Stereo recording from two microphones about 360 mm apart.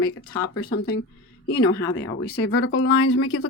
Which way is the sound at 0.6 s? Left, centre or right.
Left.